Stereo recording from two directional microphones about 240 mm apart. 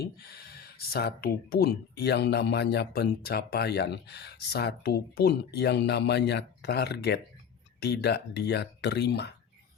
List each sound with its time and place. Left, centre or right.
0.0 s speech: left